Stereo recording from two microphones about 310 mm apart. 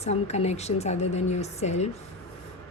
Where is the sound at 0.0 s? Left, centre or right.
Left.